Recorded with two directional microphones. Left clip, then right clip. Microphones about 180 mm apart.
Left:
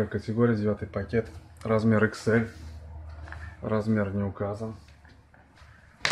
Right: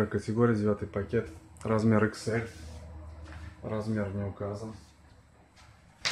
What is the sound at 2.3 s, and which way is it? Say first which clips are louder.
Speech: left 7 dB; 20° left (ahead or behind).